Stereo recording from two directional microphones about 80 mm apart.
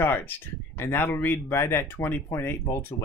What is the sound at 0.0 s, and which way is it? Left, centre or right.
Speech, left.